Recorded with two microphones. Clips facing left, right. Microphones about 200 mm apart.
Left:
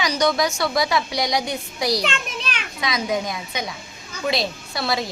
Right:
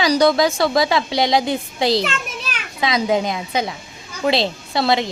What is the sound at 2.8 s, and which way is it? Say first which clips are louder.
Speech: right 6 dB; 25° right (ahead or behind).